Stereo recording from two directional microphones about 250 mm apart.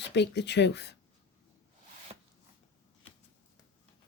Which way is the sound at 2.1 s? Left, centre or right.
Centre.